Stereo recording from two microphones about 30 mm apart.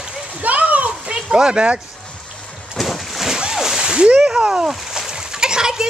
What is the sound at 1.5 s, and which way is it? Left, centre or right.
Speech, right.